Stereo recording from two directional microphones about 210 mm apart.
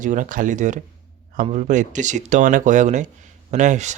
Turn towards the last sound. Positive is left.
turn(degrees=-35)  # may be behind; listen again after turning